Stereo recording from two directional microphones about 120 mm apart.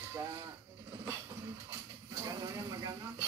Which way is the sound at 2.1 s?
25° right (ahead or behind).